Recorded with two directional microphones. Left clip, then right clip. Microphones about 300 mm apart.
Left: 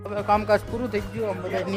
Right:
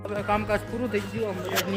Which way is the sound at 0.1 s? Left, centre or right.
Centre.